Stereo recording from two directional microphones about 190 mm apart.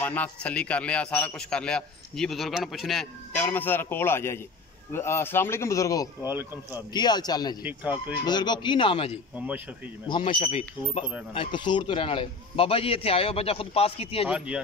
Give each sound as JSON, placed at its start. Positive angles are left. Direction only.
{"t": 0.0, "sound": "a man's voice", "side_deg": 10}
{"t": 3.3, "sound": "a man's voice", "side_deg": 10}
{"t": 6.2, "sound": "speech", "side_deg": -10}
{"t": 6.7, "sound": "a man's voice", "side_deg": 20}
{"t": 7.6, "sound": "speech", "side_deg": -5}
{"t": 8.3, "sound": "a man's voice", "side_deg": 25}
{"t": 14.2, "sound": "a man's voice", "side_deg": -5}